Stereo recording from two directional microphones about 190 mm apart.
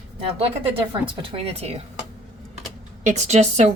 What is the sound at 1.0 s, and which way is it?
Speech, 30° right (ahead or behind).